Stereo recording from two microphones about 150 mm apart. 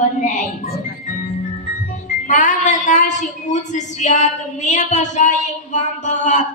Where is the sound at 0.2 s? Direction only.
50° left (ahead or behind).